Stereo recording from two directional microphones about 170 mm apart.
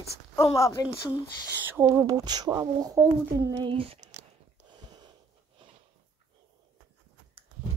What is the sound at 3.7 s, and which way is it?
Speech, 30° right (ahead or behind).